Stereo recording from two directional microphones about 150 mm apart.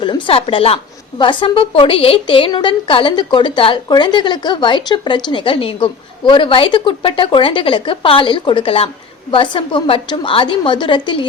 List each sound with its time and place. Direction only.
0.0 s a woman's voice: 35° left (ahead or behind)